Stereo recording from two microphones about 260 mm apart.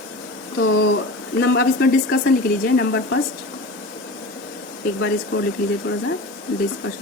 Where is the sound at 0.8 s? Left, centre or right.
Left.